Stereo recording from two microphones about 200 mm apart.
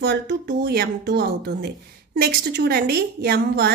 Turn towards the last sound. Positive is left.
turn(degrees=-55)  # may be behind; listen again after turning